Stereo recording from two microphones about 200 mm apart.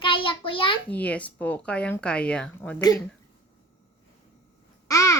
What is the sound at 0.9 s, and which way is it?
Speech, 5° left (ahead or behind).